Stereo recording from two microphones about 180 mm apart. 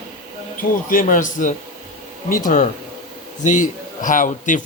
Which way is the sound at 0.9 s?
45° left (ahead or behind).